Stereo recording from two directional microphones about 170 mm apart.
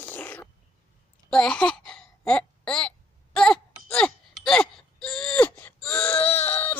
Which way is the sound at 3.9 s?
5° left (ahead or behind).